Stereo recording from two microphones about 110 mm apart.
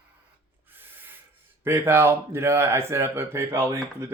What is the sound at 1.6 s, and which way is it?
Speech, 20° right (ahead or behind).